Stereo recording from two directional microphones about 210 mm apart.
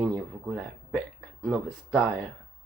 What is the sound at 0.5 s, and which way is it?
Speech, centre (ahead or behind).